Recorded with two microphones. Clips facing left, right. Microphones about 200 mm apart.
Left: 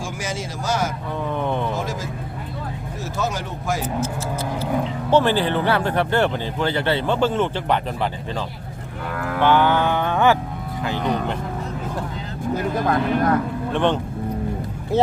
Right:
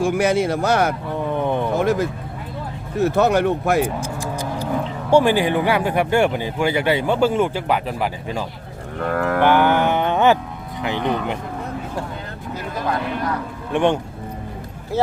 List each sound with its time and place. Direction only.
0.0 s speech: 60° right (ahead or behind)
1.1 s speech: 15° right (ahead or behind)
1.7 s speech: 60° right (ahead or behind)
5.1 s speech: 10° right (ahead or behind)
9.0 s livestock: 55° right (ahead or behind)
9.6 s a sound: 15° right (ahead or behind)
10.8 s speech: 20° right (ahead or behind)
12.5 s speech: 50° left (ahead or behind)
13.7 s speech: 10° right (ahead or behind)
14.9 s speech: 20° left (ahead or behind)